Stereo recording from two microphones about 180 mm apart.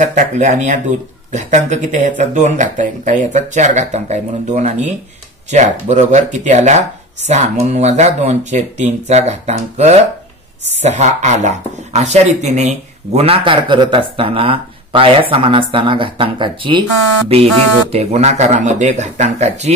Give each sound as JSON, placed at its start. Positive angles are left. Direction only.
{"t": 0.0, "sound": "speech", "side_deg": -45}